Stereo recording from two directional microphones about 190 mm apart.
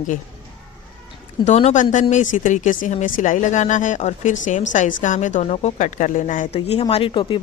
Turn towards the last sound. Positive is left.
turn(degrees=25)  # may be behind; listen again after turning